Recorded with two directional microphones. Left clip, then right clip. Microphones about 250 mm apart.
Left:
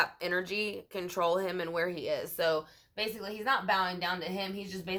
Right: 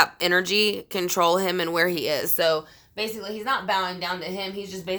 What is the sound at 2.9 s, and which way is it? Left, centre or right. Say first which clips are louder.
A woman's voice: right 6 dB; right.